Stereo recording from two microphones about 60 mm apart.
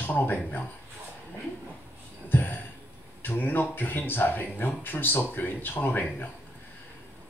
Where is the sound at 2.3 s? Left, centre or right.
Left.